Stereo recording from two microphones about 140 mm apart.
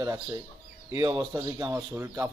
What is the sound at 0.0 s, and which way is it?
Speech, 20° right (ahead or behind).